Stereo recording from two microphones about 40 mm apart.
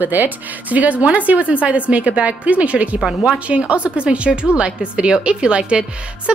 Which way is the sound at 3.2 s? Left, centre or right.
Right.